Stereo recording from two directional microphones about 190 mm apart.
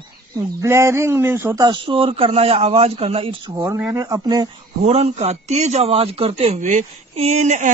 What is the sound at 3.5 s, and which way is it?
Speech, 15° right (ahead or behind).